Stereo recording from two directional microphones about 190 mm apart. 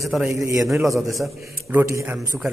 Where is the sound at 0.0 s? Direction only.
Centre (ahead or behind).